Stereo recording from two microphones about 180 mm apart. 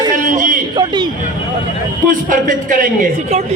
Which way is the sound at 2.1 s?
45° right (ahead or behind).